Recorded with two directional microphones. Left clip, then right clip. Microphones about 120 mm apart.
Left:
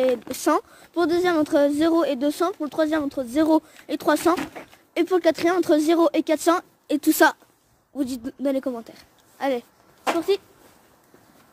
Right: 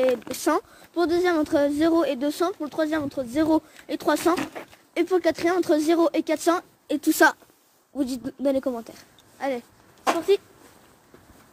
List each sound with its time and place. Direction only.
0.0 s speech: 50° left (ahead or behind)
4.9 s speech: 85° left; by 7.2 s 60° left (ahead or behind)
7.9 s speech: 15° left (ahead or behind)
9.4 s speech: 90° left
10.1 s speech: 30° left (ahead or behind)